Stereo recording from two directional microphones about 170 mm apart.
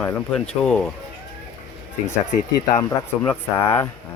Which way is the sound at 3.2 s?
15° left (ahead or behind).